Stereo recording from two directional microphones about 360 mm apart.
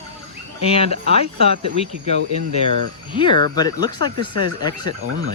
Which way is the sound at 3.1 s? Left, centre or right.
Centre.